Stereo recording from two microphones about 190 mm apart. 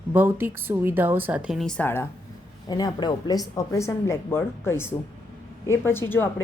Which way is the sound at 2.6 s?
20° left (ahead or behind).